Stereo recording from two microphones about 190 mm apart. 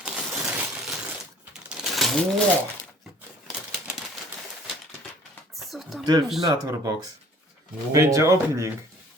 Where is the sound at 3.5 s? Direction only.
5° right (ahead or behind).